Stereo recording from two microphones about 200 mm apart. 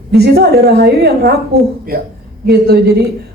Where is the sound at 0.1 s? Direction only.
55° right (ahead or behind).